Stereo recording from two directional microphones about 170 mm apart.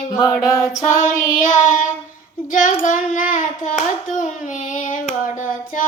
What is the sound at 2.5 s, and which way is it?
Child singing, 50° left (ahead or behind).